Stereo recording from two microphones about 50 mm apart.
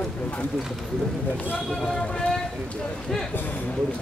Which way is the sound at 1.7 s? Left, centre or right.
Centre.